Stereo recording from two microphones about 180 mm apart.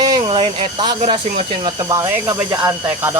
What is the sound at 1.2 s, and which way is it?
Speech, 40° right (ahead or behind).